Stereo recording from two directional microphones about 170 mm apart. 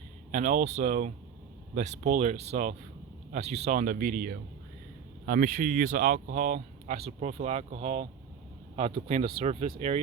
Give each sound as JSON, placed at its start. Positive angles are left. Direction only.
{"t": 0.3, "sound": "speech", "side_deg": -45}